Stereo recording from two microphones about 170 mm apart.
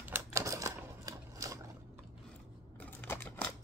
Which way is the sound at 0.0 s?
15° right (ahead or behind).